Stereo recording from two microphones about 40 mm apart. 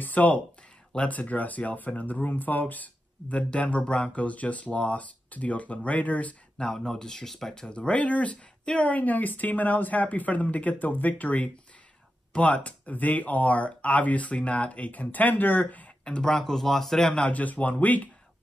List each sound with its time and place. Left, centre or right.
0.0 s speech: left
6.6 s speech: centre
7.6 s speech: left
16.0 s speech: left
16.3 s speech: centre
17.1 s speech: left